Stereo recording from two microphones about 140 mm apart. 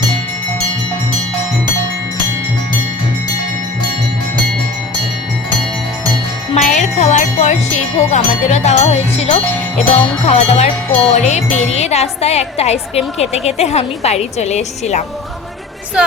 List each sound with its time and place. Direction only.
6.6 s wind chime: 60° left (ahead or behind)
10.2 s speech: 50° left (ahead or behind)